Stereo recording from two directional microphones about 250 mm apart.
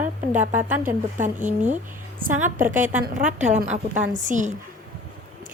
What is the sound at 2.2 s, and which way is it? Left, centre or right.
A woman's voice, right.